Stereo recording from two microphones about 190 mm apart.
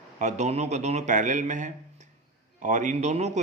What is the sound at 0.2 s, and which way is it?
Speech, 40° right (ahead or behind).